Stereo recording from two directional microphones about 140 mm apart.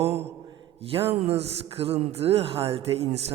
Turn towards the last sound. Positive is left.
turn(degrees=-45)  # may be behind; listen again after turning